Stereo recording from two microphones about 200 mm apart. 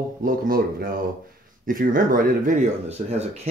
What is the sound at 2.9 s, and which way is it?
Speech, 30° right (ahead or behind).